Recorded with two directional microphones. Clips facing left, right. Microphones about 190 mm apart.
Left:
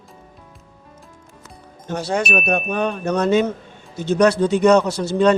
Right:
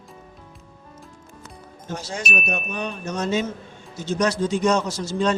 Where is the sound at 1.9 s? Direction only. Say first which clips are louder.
Left 8 dB; 60° left (ahead or behind).